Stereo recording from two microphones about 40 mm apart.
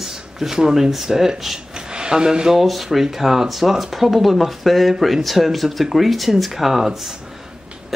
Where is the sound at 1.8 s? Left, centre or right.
Centre.